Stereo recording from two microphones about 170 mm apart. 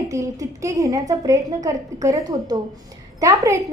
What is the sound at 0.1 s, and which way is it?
A woman's voice, 20° right (ahead or behind).